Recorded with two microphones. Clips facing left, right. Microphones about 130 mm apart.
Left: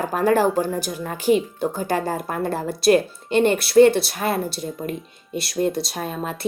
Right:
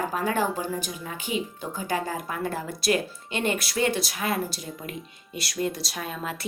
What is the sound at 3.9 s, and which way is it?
Speech, 65° left (ahead or behind).